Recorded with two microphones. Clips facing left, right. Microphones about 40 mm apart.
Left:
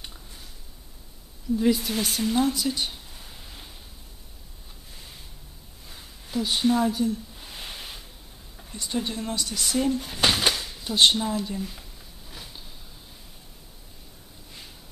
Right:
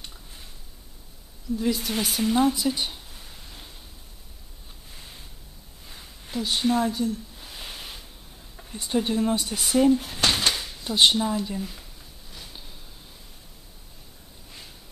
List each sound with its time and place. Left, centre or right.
1.6 s speech: centre
6.3 s a sound: centre
8.7 s speech: centre